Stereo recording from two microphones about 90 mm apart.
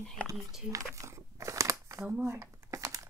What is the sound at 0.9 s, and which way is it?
Crumpling, 35° right (ahead or behind).